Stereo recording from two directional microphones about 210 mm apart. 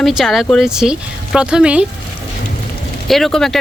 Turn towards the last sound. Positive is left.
turn(degrees=0)  # may be behind; listen again after turning